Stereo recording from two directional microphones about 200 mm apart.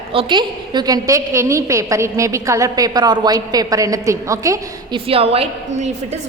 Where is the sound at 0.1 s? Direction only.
25° right (ahead or behind).